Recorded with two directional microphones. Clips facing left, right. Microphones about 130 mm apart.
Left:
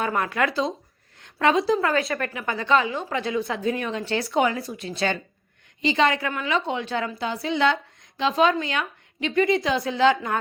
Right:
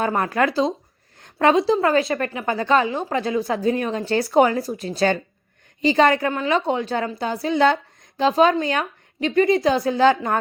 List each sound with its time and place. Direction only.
0.0 s a woman's voice: 35° right (ahead or behind)